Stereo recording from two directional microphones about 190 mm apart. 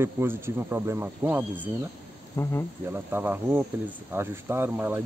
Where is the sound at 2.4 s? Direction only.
15° left (ahead or behind).